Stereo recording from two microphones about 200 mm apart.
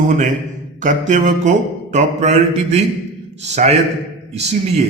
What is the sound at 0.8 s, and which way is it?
A man's voice, 40° right (ahead or behind).